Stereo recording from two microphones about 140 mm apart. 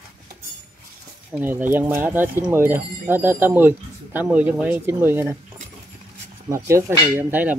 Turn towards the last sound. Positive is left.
turn(degrees=-15)  # may be behind; listen again after turning